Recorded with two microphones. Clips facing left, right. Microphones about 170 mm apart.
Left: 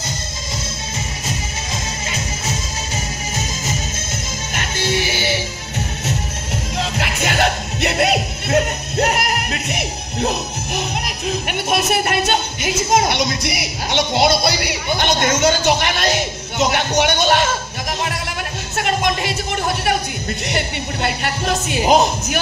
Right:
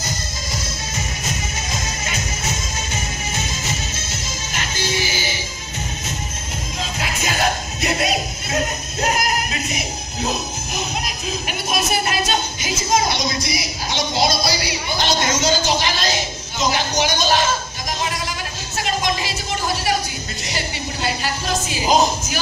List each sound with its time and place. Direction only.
2.0 s music: 30° left (ahead or behind)
4.6 s music: 60° left (ahead or behind)
6.8 s music: 70° left (ahead or behind)
18.8 s a sound: 60° left (ahead or behind)
20.4 s music: 60° left (ahead or behind)